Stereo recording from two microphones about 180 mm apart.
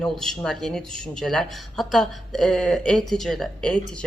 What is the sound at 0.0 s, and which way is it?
Speech, 5° left (ahead or behind).